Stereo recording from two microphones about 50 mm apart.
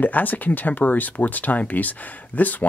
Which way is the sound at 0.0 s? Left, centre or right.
Left.